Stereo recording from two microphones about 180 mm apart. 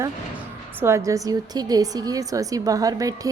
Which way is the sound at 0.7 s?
15° right (ahead or behind).